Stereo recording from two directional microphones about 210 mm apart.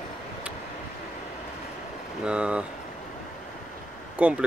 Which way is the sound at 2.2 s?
5° right (ahead or behind).